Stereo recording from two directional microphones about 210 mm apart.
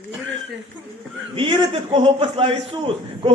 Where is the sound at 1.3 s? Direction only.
25° right (ahead or behind).